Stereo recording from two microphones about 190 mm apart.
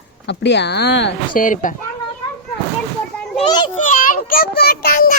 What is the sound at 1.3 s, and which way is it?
Speech, 45° left (ahead or behind).